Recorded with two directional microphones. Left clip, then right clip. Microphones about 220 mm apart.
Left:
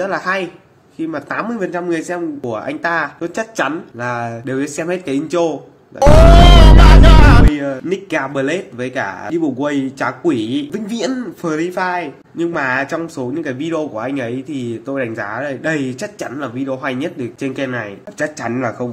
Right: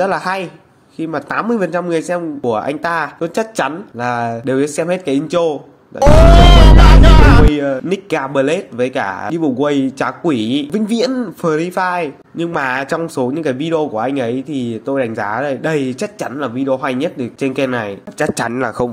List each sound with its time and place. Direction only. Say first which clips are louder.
0.0 s speech: right 2 dB; 25° right (ahead or behind)
5.9 s music: even; centre (ahead or behind)
7.5 s speech: right 3 dB; 20° right (ahead or behind)
18.3 s speech: right 3 dB; 40° right (ahead or behind)